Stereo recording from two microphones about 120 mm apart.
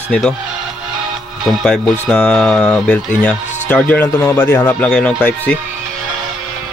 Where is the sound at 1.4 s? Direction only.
Centre (ahead or behind).